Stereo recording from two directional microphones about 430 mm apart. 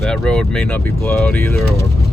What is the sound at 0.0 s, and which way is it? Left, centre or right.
Speech, centre.